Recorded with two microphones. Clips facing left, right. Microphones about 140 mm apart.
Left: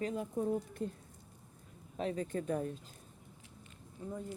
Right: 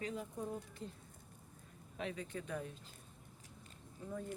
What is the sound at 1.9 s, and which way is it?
Speech, 40° left (ahead or behind).